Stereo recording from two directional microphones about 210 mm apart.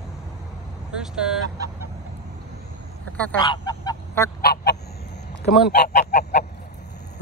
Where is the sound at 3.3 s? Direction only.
20° left (ahead or behind).